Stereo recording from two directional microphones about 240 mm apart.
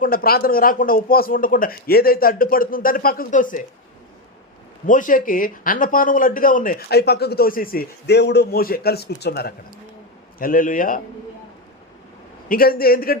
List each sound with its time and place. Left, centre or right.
0.0 s speech: left
4.9 s speech: left
12.5 s speech: left